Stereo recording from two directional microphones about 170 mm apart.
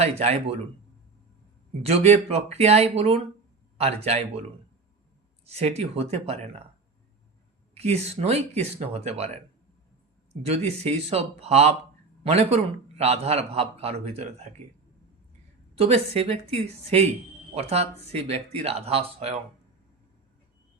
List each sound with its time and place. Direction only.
0.2 s a man's voice: 40° right (ahead or behind)
1.8 s a man's voice: 40° right (ahead or behind)
5.5 s a man's voice: 40° right (ahead or behind)
7.7 s a man's voice: 40° right (ahead or behind)
10.4 s a man's voice: 35° right (ahead or behind)
15.7 s a man's voice: 35° right (ahead or behind)